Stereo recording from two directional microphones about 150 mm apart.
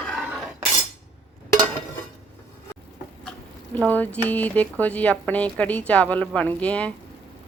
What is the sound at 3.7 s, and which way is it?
Speech, 10° left (ahead or behind).